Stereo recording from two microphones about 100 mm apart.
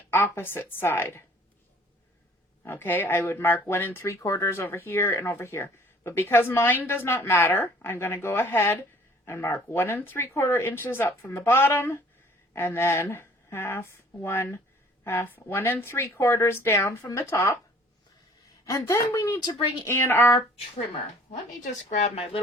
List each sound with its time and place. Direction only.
0.1 s speech: 25° left (ahead or behind)
2.6 s speech: 20° left (ahead or behind)
18.6 s speech: 30° left (ahead or behind)
21.8 s speech: 75° left (ahead or behind)